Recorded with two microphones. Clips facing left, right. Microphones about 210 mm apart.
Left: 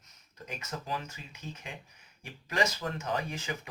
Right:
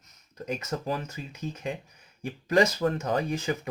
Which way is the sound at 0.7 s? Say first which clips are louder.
Right 4 dB; 50° right (ahead or behind).